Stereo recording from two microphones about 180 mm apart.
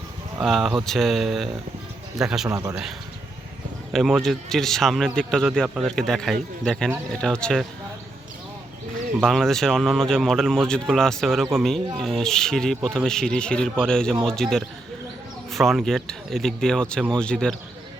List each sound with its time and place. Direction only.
0.4 s a man's voice: centre (ahead or behind)
2.5 s a man's voice: 20° right (ahead or behind)
3.9 s a man's voice: centre (ahead or behind)
9.2 s a man's voice: centre (ahead or behind)